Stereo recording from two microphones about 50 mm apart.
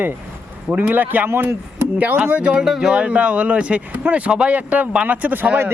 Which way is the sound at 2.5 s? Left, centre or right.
Centre.